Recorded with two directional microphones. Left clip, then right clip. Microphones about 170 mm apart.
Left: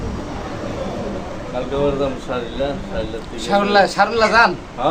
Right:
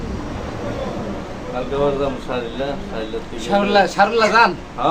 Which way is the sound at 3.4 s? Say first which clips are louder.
Left 1 dB; 20° left (ahead or behind).